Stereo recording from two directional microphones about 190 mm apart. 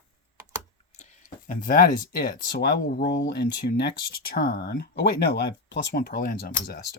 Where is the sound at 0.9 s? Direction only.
35° left (ahead or behind).